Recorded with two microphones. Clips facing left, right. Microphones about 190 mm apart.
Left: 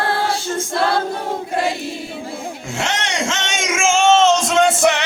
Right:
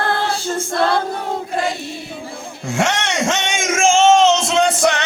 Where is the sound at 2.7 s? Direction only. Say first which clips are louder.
Right 5 dB; 55° right (ahead or behind).